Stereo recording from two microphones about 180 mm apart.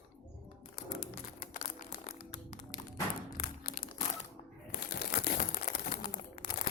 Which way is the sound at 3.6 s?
55° left (ahead or behind).